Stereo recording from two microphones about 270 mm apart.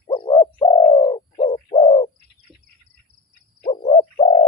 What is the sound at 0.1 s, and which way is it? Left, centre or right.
Bird, centre.